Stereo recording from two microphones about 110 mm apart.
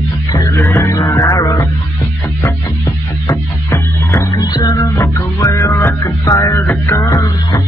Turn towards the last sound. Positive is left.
turn(degrees=30)  # may be behind; listen again after turning